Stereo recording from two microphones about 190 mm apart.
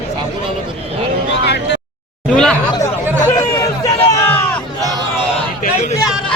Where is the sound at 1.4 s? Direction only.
65° left (ahead or behind).